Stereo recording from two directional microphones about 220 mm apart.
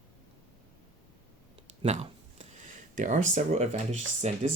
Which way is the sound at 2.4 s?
30° right (ahead or behind).